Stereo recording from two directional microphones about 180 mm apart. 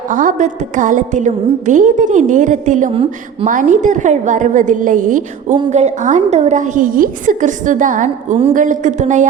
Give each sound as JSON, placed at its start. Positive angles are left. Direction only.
{"t": 0.1, "sound": "a woman's voice", "side_deg": -45}